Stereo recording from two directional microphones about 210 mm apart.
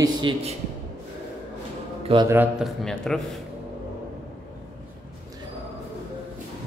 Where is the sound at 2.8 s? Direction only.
Centre (ahead or behind).